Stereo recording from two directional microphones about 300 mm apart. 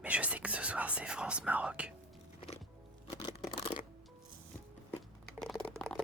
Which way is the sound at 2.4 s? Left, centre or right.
Centre.